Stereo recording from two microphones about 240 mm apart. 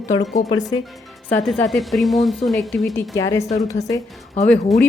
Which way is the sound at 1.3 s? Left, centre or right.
Centre.